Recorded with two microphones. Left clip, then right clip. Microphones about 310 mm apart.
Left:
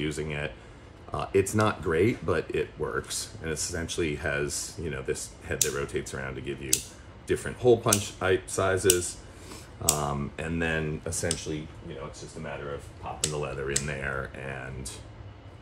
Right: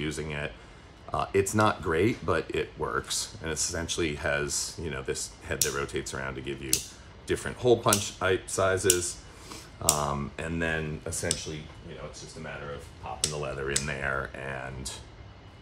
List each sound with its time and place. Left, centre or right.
0.0 s speech: centre
13.2 s speech: centre